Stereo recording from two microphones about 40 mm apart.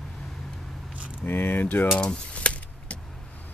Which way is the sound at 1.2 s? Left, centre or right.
Left.